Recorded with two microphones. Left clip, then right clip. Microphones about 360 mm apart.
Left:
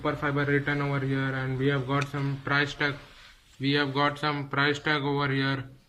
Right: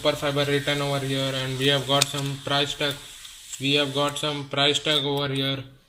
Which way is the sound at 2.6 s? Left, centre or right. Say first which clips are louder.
Right 2 dB; centre.